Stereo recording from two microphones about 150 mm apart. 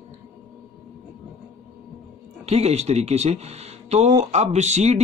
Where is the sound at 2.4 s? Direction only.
45° right (ahead or behind).